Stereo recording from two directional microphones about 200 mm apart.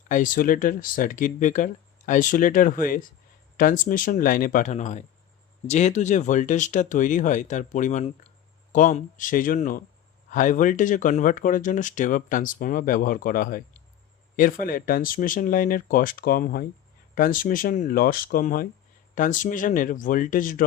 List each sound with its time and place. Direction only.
0.1 s speech: 40° left (ahead or behind)